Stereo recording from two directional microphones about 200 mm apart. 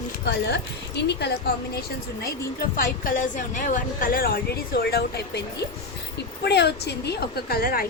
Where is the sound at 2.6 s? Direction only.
45° left (ahead or behind).